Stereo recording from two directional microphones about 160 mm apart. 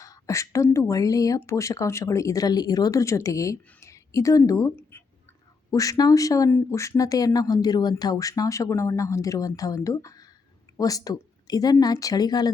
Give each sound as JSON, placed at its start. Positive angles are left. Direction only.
{"t": 0.0, "sound": "speech", "side_deg": 20}